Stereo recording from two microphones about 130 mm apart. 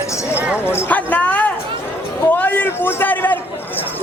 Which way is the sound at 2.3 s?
15° left (ahead or behind).